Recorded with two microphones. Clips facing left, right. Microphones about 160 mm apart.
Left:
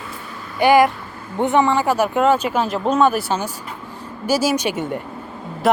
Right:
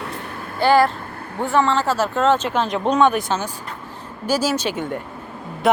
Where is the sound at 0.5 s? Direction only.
15° left (ahead or behind).